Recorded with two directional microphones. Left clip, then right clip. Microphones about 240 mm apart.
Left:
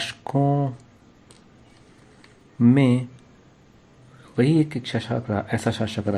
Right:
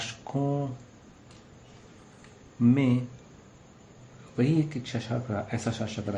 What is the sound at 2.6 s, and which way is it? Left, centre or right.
Speech, left.